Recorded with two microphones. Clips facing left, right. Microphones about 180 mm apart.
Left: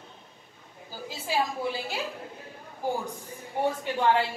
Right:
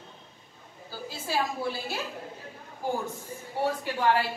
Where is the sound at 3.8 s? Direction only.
25° left (ahead or behind).